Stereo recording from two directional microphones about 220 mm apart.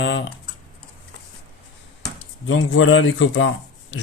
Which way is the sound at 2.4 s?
60° left (ahead or behind).